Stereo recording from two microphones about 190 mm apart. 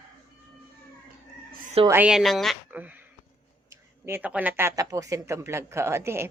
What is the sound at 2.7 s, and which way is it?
Speech, 10° right (ahead or behind).